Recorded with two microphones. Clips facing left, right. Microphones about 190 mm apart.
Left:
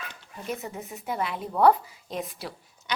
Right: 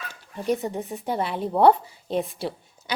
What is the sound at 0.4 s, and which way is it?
A woman's voice, 30° right (ahead or behind).